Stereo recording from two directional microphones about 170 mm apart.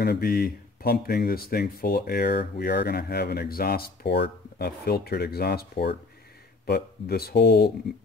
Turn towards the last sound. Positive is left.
turn(degrees=70)  # may be behind; listen again after turning